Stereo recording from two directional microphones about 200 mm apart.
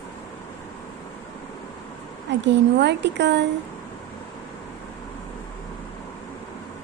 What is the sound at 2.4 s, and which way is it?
Speech, 60° right (ahead or behind).